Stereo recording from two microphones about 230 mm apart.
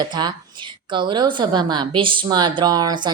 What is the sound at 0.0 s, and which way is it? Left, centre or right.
A woman's voice, centre.